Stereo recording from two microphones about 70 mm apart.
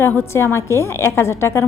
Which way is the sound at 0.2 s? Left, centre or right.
Left.